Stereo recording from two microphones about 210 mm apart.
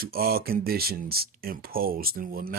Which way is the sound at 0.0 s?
45° right (ahead or behind).